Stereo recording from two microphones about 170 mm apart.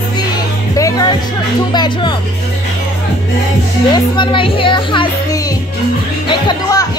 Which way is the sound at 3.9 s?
30° left (ahead or behind).